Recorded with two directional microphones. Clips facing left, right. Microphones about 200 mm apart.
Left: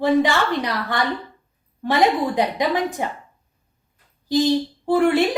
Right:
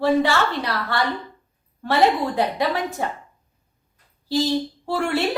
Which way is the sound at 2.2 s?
15° left (ahead or behind).